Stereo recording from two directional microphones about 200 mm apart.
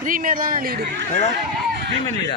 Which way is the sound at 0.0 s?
45° right (ahead or behind).